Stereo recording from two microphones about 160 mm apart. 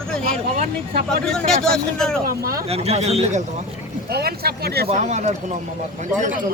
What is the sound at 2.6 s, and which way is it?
Speech, 40° right (ahead or behind).